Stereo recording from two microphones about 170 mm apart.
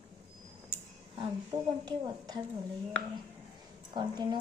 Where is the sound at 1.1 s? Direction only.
25° right (ahead or behind).